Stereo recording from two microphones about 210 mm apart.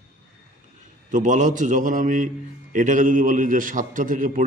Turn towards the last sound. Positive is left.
turn(degrees=-40)  # may be behind; listen again after turning